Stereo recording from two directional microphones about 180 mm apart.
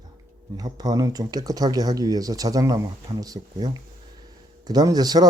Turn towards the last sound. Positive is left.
turn(degrees=-20)  # may be behind; listen again after turning